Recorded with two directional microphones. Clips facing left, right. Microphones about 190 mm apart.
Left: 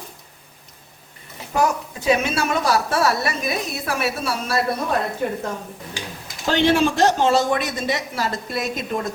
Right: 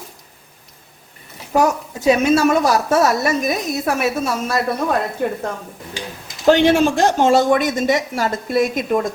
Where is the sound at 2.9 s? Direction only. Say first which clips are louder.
Right 5 dB; 45° right (ahead or behind).